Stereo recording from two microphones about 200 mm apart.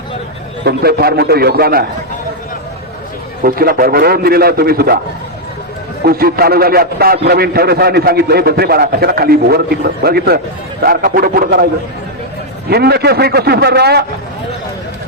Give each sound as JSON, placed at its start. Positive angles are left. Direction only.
{"t": 0.6, "sound": "a man's voice", "side_deg": -55}
{"t": 3.4, "sound": "a man's voice", "side_deg": -50}
{"t": 6.1, "sound": "a man's voice", "side_deg": -50}